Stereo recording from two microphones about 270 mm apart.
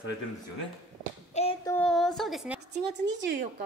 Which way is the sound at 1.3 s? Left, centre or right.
Left.